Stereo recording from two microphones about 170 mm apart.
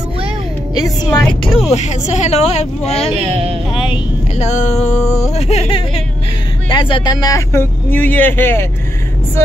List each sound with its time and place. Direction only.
0.7 s speech: 20° left (ahead or behind)
1.2 s speech: centre (ahead or behind)
1.7 s speech: 45° left (ahead or behind)
3.2 s speech: 35° right (ahead or behind)
3.7 s speech: 30° left (ahead or behind)
5.0 s speech: 20° left (ahead or behind)
5.3 s speech: 40° left (ahead or behind); by 8.6 s 15° left (ahead or behind)